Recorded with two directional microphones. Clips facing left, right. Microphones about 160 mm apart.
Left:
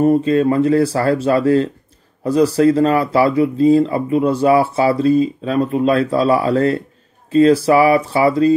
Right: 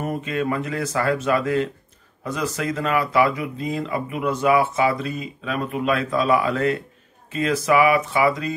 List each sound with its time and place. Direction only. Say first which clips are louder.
0.0 s speech: left 12 dB; 30° left (ahead or behind)